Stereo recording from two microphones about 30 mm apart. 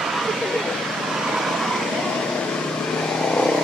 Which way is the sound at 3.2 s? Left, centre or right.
Left.